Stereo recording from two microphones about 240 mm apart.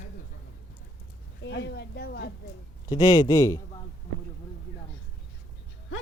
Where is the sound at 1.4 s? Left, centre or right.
Left.